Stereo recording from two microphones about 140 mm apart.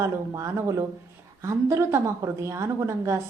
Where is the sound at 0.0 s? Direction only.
20° right (ahead or behind).